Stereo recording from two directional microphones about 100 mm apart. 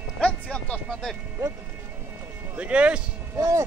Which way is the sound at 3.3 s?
30° right (ahead or behind).